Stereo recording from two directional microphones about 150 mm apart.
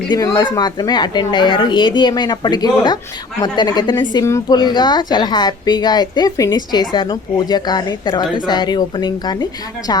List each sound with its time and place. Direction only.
0.1 s a woman's voice: 25° left (ahead or behind)